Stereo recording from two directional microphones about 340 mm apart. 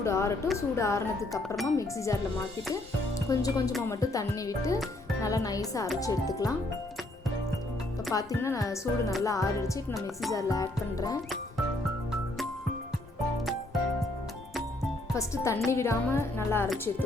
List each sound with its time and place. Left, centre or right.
0.0 s a woman's voice: centre
3.3 s a woman's voice: centre
8.1 s a woman's voice: centre
15.1 s a woman's voice: centre